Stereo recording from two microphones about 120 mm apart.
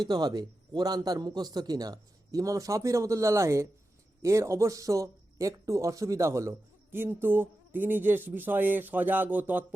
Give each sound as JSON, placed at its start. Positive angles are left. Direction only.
{"t": 0.0, "sound": "a man's voice", "side_deg": -35}